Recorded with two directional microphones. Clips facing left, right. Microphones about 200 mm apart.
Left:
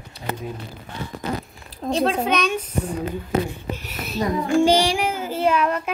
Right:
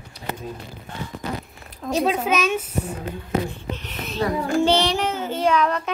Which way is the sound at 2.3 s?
5° right (ahead or behind).